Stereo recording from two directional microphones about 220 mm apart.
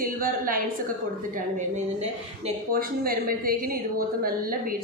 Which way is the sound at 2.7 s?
40° right (ahead or behind).